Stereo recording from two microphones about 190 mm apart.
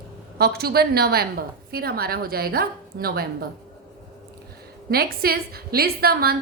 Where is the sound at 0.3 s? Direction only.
55° right (ahead or behind).